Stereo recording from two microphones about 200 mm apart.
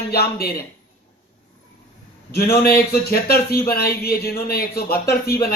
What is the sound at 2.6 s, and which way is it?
Speech, 50° left (ahead or behind).